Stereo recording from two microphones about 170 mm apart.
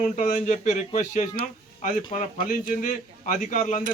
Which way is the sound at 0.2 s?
45° left (ahead or behind).